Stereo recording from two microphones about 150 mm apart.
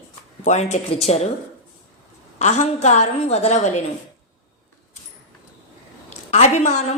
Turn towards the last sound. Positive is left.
turn(degrees=50)  # may be behind; listen again after turning